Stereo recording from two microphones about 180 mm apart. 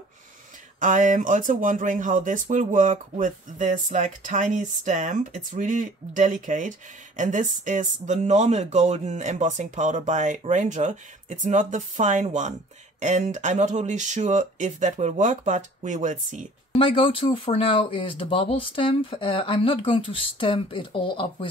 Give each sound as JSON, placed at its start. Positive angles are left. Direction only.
{"t": 0.7, "sound": "speech", "side_deg": -45}
{"t": 16.7, "sound": "speech", "side_deg": 30}